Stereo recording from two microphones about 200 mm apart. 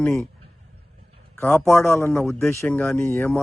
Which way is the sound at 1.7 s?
Centre (ahead or behind).